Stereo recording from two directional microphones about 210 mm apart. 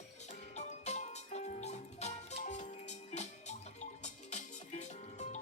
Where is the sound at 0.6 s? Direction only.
35° left (ahead or behind).